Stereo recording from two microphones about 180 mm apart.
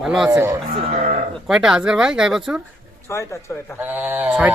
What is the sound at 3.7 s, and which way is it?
Speech, 10° right (ahead or behind).